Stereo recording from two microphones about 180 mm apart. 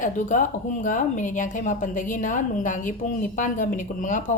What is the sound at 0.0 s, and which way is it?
Speech, 45° left (ahead or behind).